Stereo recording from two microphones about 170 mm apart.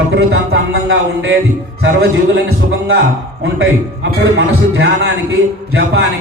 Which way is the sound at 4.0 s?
80° right.